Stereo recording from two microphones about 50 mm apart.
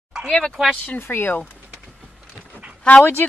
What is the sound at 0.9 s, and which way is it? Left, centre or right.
Speech, left.